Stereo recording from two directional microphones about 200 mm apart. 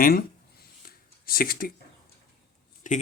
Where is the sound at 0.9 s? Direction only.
50° left (ahead or behind).